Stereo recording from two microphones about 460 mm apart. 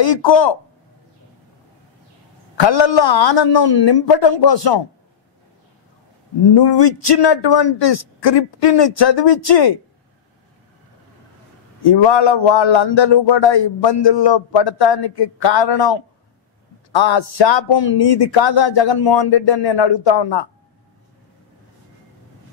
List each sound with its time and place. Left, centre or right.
0.0 s a man's voice: left
2.6 s speech: left
6.5 s a man's voice: left
11.8 s a man's voice: left